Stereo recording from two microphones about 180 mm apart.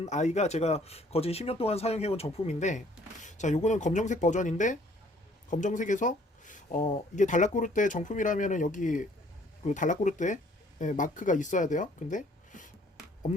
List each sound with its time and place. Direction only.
0.0 s speech: 40° left (ahead or behind)